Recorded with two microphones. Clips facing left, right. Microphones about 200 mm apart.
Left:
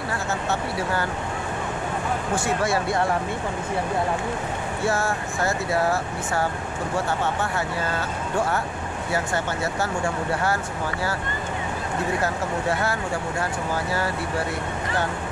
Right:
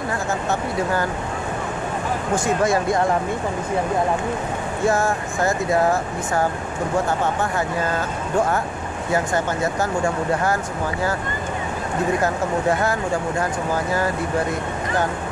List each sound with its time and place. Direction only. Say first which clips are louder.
2.3 s speech: right 5 dB; 15° right (ahead or behind)
4.8 s speech: right 5 dB; 15° right (ahead or behind)
9.1 s speech: right 5 dB; 15° right (ahead or behind)